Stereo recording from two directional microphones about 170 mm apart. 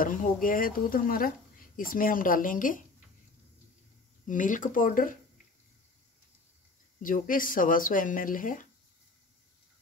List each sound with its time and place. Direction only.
0.0 s speech: 55° left (ahead or behind)
4.3 s speech: 50° left (ahead or behind)
7.0 s speech: 55° left (ahead or behind)